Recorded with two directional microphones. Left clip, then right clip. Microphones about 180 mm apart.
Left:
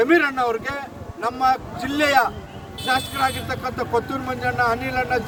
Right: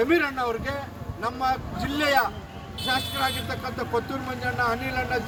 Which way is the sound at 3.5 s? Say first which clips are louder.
Left 5 dB; 40° left (ahead or behind).